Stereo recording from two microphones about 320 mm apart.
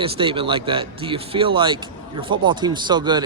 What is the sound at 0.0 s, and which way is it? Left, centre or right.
Speech, centre.